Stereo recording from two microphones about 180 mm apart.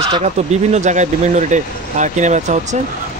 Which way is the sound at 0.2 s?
35° right (ahead or behind).